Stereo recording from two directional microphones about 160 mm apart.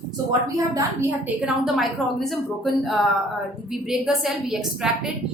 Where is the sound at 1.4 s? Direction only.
Centre (ahead or behind).